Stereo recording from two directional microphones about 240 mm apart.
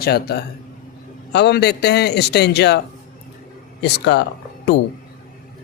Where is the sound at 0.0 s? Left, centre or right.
Left.